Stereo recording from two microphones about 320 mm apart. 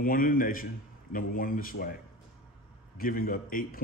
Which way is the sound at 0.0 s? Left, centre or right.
Left.